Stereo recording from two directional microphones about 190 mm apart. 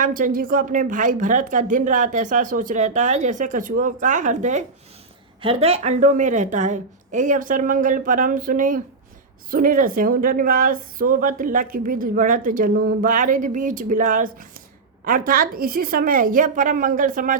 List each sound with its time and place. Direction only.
0.0 s a woman's voice: 45° right (ahead or behind)